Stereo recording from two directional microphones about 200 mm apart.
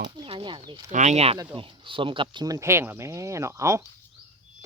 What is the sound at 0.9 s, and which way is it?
Speech, 35° right (ahead or behind).